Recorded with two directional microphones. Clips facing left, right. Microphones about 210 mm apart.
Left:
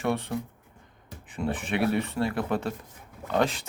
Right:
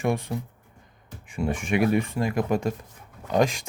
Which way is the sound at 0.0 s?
15° right (ahead or behind).